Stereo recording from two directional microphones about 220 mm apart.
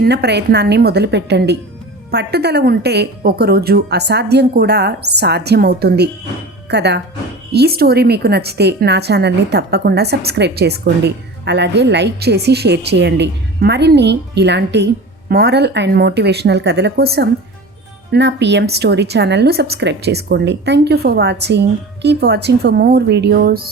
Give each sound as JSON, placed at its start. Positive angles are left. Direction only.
{"t": 0.0, "sound": "a woman's voice", "side_deg": -50}